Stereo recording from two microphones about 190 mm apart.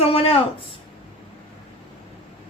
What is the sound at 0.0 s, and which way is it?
Speech, 30° left (ahead or behind).